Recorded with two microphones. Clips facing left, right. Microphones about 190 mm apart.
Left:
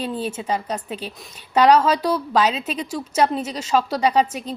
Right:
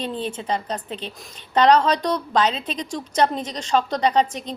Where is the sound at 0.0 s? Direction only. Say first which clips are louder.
Left 1 dB; 5° left (ahead or behind).